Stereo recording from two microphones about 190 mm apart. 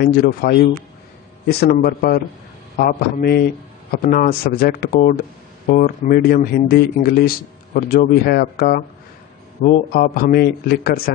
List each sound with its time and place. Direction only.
0.0 s speech: 50° left (ahead or behind)